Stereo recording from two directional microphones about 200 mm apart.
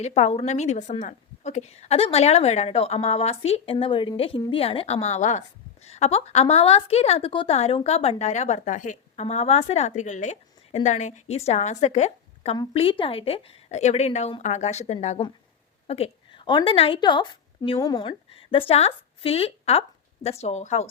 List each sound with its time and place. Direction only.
0.0 s a woman's voice: 35° left (ahead or behind)